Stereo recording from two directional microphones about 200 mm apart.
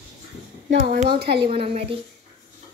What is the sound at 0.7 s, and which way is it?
Speech, 50° right (ahead or behind).